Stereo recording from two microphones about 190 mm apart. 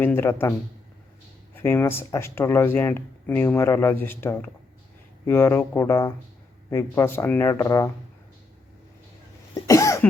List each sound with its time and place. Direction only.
0.0 s speech: 10° left (ahead or behind)
1.6 s speech: 10° left (ahead or behind)
9.6 s cough: 15° left (ahead or behind)